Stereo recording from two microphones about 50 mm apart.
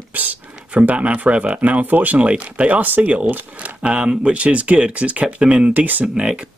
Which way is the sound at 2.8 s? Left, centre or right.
Right.